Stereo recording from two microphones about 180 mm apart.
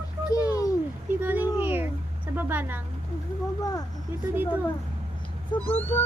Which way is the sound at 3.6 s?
20° left (ahead or behind).